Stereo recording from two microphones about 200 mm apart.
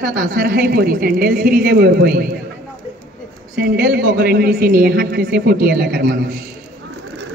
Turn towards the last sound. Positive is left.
turn(degrees=-50)  # may be behind; listen again after turning